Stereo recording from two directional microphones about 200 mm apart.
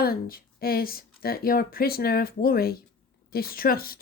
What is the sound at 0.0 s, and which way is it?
Speech, 45° left (ahead or behind).